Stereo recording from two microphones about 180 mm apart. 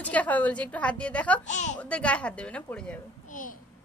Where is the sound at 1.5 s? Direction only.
40° left (ahead or behind).